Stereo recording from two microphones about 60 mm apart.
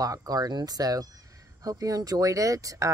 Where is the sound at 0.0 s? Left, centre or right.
Right.